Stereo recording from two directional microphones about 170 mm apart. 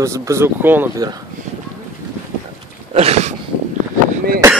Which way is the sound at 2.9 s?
40° right (ahead or behind).